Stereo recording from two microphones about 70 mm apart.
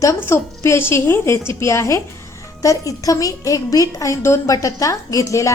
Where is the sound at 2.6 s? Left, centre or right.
Left.